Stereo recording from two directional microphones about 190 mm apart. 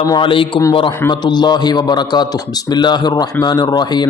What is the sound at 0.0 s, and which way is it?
A man's voice, 25° left (ahead or behind).